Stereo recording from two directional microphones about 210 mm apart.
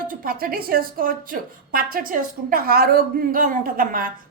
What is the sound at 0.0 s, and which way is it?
Speech, 40° right (ahead or behind).